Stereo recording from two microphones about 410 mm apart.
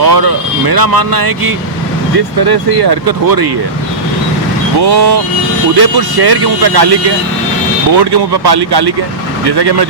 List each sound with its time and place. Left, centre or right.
0.0 s speech: right
2.4 s speech: right
4.8 s speech: right
7.9 s speech: right